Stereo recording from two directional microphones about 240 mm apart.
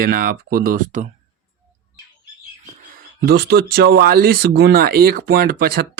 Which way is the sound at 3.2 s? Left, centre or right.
Right.